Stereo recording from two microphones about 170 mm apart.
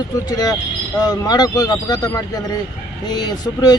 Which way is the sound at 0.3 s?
20° left (ahead or behind).